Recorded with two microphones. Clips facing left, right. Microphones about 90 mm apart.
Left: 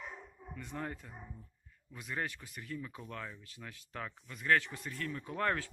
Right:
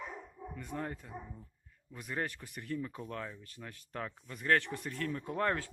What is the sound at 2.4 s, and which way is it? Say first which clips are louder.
Speech: right 3 dB; 5° right (ahead or behind).